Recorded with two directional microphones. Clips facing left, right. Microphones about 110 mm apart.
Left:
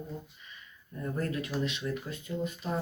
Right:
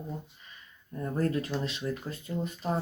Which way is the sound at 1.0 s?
35° right (ahead or behind).